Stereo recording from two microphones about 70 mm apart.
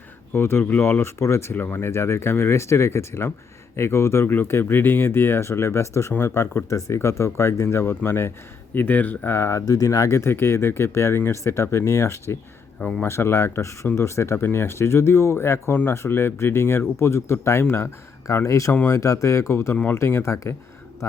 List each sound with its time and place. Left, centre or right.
0.3 s speech: left
9.6 s speech: left
19.7 s speech: left
20.0 s speech: left